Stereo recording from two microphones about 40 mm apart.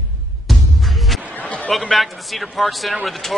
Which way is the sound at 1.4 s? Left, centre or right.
Left.